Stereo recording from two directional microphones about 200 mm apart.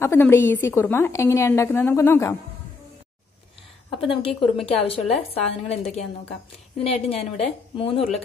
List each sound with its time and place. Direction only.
0.0 s a woman's voice: 10° left (ahead or behind)
4.0 s a woman's voice: 25° left (ahead or behind)